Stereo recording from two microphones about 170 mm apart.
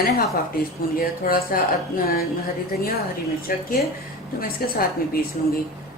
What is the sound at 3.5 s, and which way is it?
A woman's voice, 55° left (ahead or behind).